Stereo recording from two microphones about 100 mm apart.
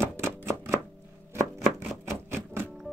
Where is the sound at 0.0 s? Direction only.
25° right (ahead or behind).